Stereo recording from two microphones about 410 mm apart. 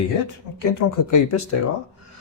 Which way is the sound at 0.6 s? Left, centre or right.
Left.